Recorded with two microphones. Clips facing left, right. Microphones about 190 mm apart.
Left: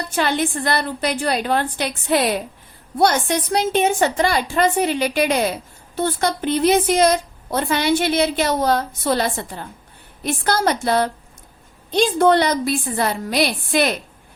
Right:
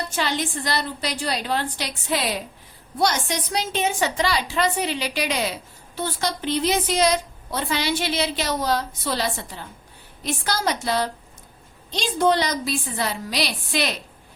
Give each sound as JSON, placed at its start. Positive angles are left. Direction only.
{"t": 0.2, "sound": "a woman's voice", "side_deg": 55}